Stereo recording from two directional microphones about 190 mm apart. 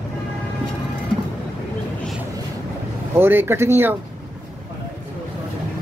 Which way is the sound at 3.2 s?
10° right (ahead or behind).